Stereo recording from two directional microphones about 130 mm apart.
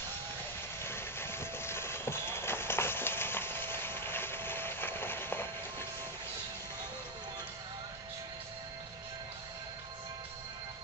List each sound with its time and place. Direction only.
0.8 s vehicle: 20° left (ahead or behind)